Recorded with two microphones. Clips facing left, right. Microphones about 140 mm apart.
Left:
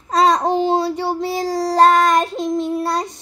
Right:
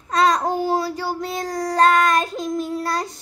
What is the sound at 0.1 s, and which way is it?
Child singing, 30° left (ahead or behind).